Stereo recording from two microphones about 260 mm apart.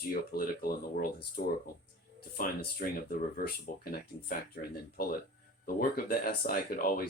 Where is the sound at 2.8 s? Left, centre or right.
Left.